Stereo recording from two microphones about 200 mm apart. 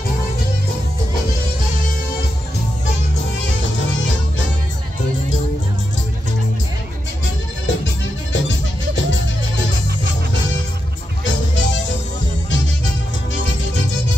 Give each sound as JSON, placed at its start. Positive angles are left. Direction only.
{"t": 7.6, "sound": "music", "side_deg": 65}
{"t": 11.2, "sound": "music", "side_deg": 65}